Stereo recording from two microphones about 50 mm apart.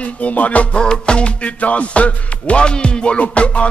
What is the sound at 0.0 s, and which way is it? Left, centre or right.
Music, left.